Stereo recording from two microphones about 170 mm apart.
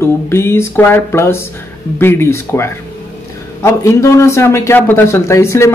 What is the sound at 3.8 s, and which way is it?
Speech, 15° left (ahead or behind).